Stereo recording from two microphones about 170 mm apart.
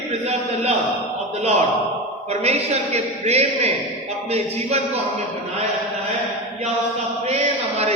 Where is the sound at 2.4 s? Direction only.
40° right (ahead or behind).